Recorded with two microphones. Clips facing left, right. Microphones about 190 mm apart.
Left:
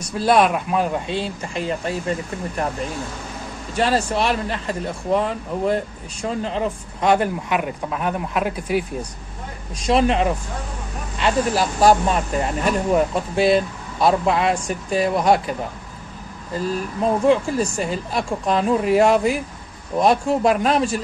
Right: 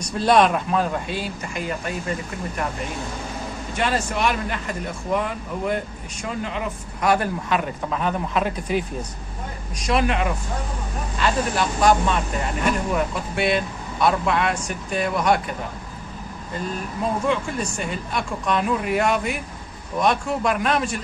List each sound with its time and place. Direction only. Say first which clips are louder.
0.0 s speech: left 1 dB; 5° left (ahead or behind); by 2.6 s 30° left (ahead or behind)
3.7 s a man's voice: left 4 dB; 35° left (ahead or behind); by 8.8 s 10° left (ahead or behind)
9.8 s speech: left 4 dB; 30° left (ahead or behind)
16.5 s speech: left 5 dB; 35° left (ahead or behind)